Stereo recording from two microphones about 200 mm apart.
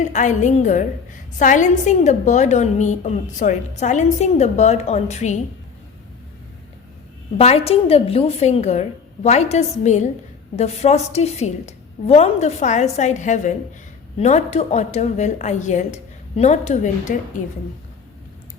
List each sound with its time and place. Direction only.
0.0 s a woman's voice: 35° left (ahead or behind)
7.3 s a woman's voice: 30° left (ahead or behind)